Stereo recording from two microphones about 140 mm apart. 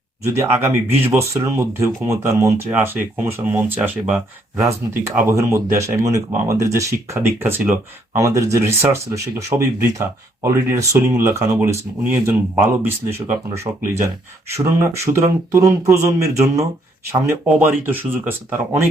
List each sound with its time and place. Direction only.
0.3 s speech: 20° right (ahead or behind)
5.3 s speech: 20° right (ahead or behind)